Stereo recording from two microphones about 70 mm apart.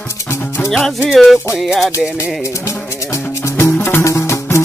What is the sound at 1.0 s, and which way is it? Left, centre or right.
Music, centre.